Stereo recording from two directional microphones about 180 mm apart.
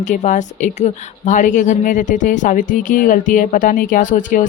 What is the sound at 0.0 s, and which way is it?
Speech, 45° left (ahead or behind).